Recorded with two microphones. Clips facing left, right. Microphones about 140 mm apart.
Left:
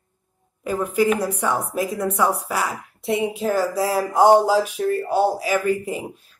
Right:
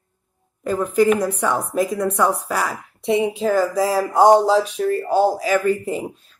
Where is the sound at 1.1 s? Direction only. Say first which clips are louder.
Right 2 dB; 10° left (ahead or behind).